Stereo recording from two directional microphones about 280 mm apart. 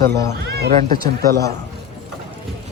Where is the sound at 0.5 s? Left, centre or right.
Right.